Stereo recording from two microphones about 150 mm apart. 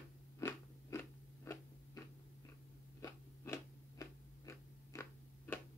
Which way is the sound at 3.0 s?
25° left (ahead or behind).